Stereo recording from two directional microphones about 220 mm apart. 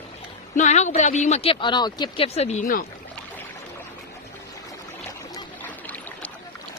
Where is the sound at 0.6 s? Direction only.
35° left (ahead or behind).